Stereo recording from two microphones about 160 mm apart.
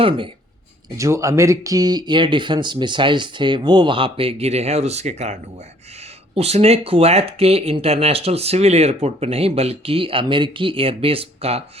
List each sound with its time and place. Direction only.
0.0 s speech: 30° right (ahead or behind)
0.9 s speech: 20° right (ahead or behind); by 11.6 s 35° right (ahead or behind)